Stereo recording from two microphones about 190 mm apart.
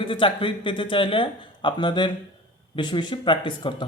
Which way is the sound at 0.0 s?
25° left (ahead or behind).